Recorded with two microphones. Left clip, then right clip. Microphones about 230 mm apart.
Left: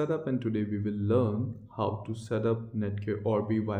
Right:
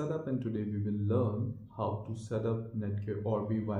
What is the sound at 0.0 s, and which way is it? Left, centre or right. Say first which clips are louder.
Speech: left 5 dB; left.